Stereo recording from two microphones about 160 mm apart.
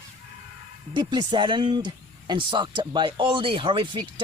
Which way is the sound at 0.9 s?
30° right (ahead or behind).